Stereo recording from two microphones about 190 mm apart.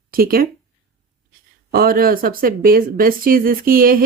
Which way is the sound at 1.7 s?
50° right (ahead or behind).